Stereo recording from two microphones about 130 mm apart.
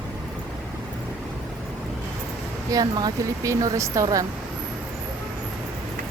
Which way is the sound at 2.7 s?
30° right (ahead or behind).